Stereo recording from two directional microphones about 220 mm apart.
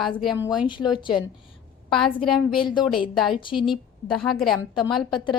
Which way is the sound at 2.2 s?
Centre (ahead or behind).